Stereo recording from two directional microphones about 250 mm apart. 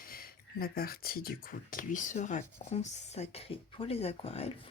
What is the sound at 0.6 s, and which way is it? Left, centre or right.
Speech, left.